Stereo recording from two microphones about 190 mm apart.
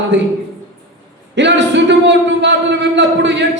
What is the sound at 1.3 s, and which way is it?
A man's voice, 70° right (ahead or behind).